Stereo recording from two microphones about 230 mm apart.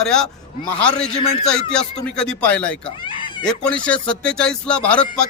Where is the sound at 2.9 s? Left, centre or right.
Left.